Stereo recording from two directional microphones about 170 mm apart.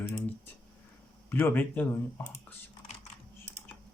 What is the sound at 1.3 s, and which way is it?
Speech, 10° left (ahead or behind).